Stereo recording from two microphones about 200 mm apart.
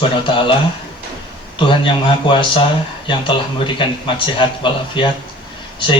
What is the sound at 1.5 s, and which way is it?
Speech, 25° left (ahead or behind).